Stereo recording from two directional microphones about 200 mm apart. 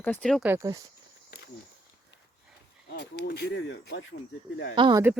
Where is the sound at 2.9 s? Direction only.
55° left (ahead or behind); by 4.1 s 70° left (ahead or behind).